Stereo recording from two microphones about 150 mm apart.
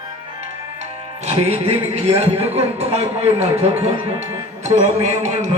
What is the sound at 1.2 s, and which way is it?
A man's voice, 45° right (ahead or behind).